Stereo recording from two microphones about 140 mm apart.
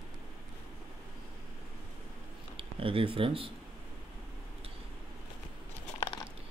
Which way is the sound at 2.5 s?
40° right (ahead or behind).